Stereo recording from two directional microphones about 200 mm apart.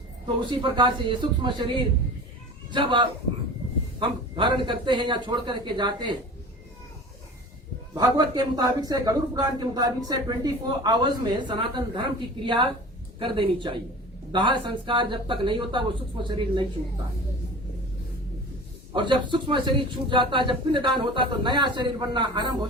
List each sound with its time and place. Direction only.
0.6 s a man's voice: 25° right (ahead or behind)
2.7 s a man's voice: 25° right (ahead or behind)
7.9 s a man's voice: 20° right (ahead or behind)
18.9 s a man's voice: 25° right (ahead or behind)